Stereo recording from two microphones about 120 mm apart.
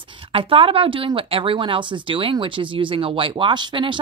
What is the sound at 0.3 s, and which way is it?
Speech, 50° right (ahead or behind).